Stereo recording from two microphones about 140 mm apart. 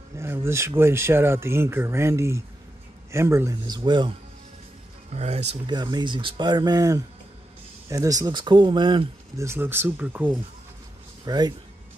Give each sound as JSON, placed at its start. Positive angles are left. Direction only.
{"t": 0.2, "sound": "a man's voice", "side_deg": -20}
{"t": 5.1, "sound": "speech", "side_deg": -50}
{"t": 5.7, "sound": "speech", "side_deg": -30}
{"t": 9.4, "sound": "speech", "side_deg": -15}
{"t": 11.2, "sound": "speech", "side_deg": -30}